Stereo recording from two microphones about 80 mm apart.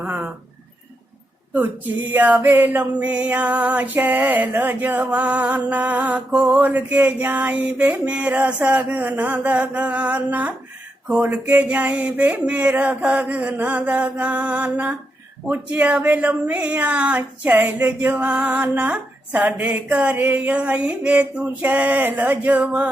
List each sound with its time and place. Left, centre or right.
0.0 s a sound: centre
2.0 s music: right
11.1 s a sound: right
17.2 s music: right
18.7 s a woman's voice: right
19.5 s music: right